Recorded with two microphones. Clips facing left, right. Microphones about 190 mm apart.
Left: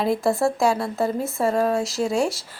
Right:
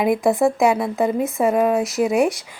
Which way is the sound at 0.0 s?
15° right (ahead or behind).